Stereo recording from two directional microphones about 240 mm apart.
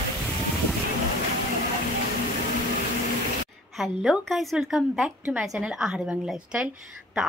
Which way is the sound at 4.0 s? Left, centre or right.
Centre.